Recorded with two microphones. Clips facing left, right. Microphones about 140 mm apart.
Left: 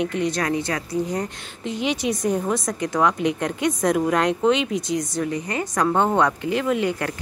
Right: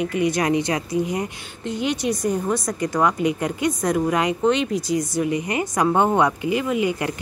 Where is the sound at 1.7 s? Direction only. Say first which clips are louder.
Right 1 dB; centre (ahead or behind).